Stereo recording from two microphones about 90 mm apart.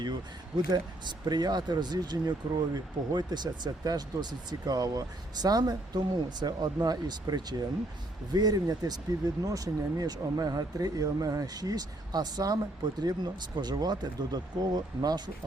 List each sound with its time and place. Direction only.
0.0 s speech: 55° right (ahead or behind)